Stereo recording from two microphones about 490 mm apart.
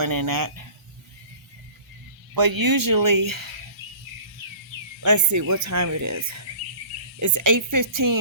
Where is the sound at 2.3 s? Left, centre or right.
Right.